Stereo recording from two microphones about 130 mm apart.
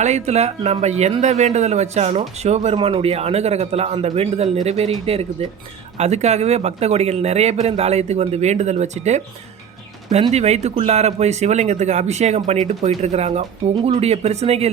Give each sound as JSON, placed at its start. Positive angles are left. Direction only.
{"t": 0.0, "sound": "speech", "side_deg": -60}
{"t": 10.3, "sound": "speech", "side_deg": -55}